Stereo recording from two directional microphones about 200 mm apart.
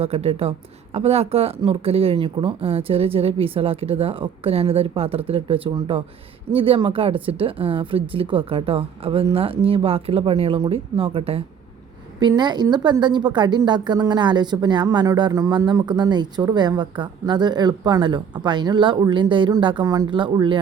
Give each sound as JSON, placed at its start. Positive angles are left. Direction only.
{"t": 0.0, "sound": "a woman's voice", "side_deg": -30}